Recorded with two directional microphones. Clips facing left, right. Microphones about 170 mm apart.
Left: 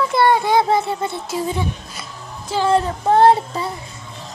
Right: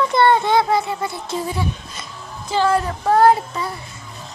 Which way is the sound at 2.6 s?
25° left (ahead or behind).